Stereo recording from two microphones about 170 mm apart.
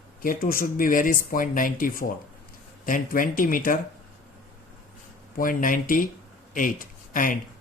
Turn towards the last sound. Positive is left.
turn(degrees=55)  # may be behind; listen again after turning